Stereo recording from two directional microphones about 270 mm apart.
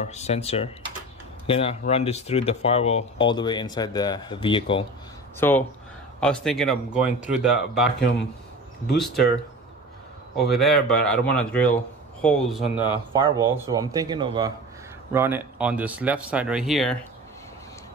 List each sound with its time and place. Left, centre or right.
0.0 s speech: left
5.4 s a man's voice: centre
10.5 s a man's voice: centre
12.6 s speech: centre
13.2 s a man's voice: centre